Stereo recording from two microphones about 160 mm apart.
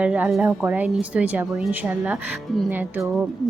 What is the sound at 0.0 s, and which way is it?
A woman's voice, 5° right (ahead or behind).